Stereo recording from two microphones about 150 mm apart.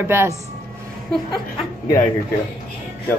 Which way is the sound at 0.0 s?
15° right (ahead or behind).